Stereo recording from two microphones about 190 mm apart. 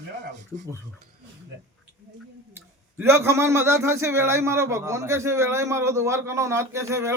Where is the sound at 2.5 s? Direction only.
15° right (ahead or behind).